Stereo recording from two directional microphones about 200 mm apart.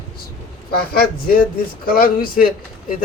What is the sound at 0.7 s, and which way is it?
Speech, 50° left (ahead or behind).